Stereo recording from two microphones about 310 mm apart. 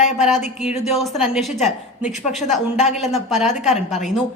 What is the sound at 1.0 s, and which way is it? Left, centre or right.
Speech, centre.